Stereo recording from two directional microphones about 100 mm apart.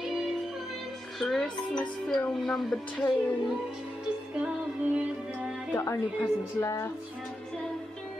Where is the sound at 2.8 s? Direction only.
15° left (ahead or behind).